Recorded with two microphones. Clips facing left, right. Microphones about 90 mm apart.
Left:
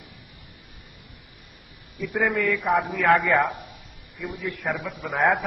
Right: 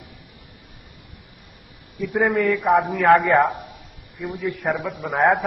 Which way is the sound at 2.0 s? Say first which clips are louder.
Right 4 dB; centre (ahead or behind).